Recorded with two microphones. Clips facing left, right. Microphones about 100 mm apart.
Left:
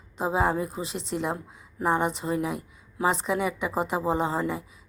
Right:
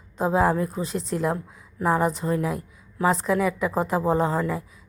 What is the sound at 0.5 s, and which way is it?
Speech, 10° left (ahead or behind).